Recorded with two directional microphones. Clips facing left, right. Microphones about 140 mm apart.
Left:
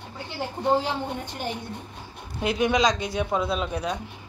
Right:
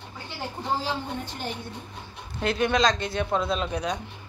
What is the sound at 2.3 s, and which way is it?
A woman's voice, 10° left (ahead or behind).